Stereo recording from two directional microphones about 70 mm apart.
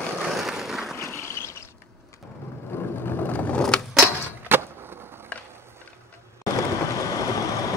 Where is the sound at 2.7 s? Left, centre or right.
Left.